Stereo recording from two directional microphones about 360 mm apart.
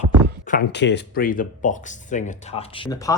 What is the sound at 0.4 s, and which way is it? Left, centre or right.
Speech, left.